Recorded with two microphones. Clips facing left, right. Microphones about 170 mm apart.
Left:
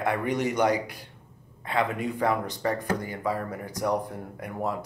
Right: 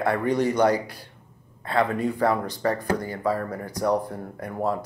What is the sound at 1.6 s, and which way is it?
Speech, 35° right (ahead or behind).